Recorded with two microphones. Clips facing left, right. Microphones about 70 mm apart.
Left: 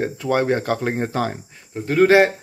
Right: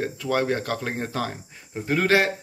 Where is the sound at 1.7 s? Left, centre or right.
Centre.